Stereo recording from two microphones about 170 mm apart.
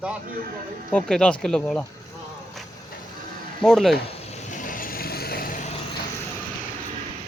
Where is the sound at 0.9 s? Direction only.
5° left (ahead or behind).